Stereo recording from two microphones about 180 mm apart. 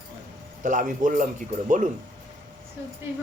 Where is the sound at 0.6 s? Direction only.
45° right (ahead or behind).